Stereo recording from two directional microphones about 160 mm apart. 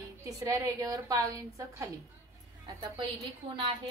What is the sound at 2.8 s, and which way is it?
Speech, 30° right (ahead or behind).